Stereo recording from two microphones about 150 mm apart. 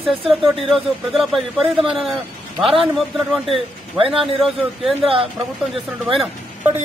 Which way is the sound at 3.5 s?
35° right (ahead or behind).